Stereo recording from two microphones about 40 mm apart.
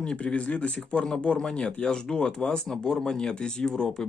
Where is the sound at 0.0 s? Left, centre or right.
Left.